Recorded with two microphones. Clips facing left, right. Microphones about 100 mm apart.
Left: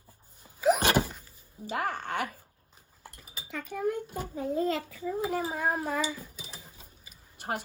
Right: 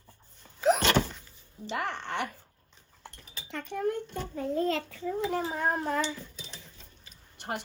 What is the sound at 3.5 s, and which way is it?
Speech, 5° left (ahead or behind).